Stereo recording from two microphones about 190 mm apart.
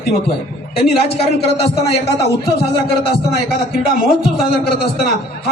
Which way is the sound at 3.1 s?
50° left (ahead or behind).